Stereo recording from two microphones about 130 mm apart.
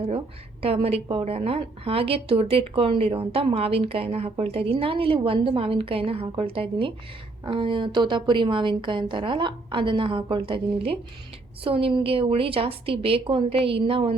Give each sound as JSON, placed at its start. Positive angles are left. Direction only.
{"t": 0.6, "sound": "a woman's voice", "side_deg": -50}